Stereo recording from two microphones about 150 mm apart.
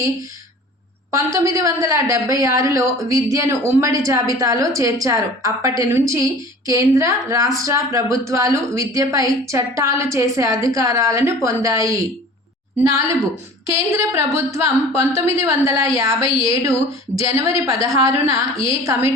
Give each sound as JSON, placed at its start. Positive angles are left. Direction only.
{"t": 1.1, "sound": "a woman's voice", "side_deg": -20}